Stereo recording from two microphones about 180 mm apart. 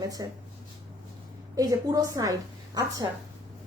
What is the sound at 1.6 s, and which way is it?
A woman's voice, 20° right (ahead or behind).